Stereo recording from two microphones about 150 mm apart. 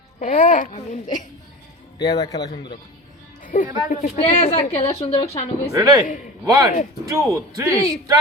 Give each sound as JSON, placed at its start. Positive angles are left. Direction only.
{"t": 0.2, "sound": "a child's voice", "side_deg": 55}
{"t": 2.0, "sound": "a man's voice", "side_deg": 25}
{"t": 3.4, "sound": "music", "side_deg": 65}
{"t": 3.8, "sound": "a child's voice", "side_deg": 60}
{"t": 4.2, "sound": "speech", "side_deg": 40}
{"t": 5.7, "sound": "a man's voice", "side_deg": -20}